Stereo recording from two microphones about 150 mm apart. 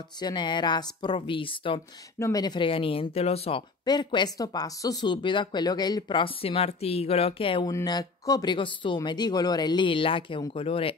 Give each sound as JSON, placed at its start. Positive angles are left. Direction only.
{"t": 0.2, "sound": "speech", "side_deg": 30}
{"t": 2.1, "sound": "speech", "side_deg": 20}
{"t": 3.8, "sound": "speech", "side_deg": 30}
{"t": 7.7, "sound": "speech", "side_deg": 25}